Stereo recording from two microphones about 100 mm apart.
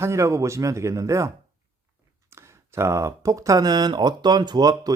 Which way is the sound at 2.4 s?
25° right (ahead or behind).